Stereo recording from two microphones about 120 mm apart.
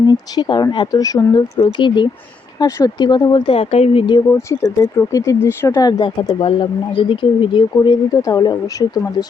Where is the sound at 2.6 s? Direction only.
30° left (ahead or behind); by 4.0 s 60° left (ahead or behind).